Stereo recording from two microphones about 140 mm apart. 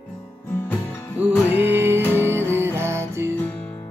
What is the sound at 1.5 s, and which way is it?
Music, 15° right (ahead or behind).